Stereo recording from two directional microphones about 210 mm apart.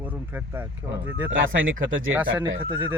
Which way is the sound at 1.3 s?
65° right (ahead or behind).